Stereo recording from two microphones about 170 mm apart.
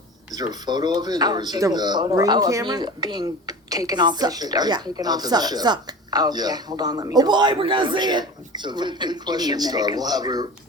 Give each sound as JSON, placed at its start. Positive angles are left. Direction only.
{"t": 0.3, "sound": "speech", "side_deg": -25}